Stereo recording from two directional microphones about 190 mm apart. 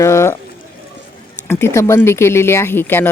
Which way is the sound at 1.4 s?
15° left (ahead or behind).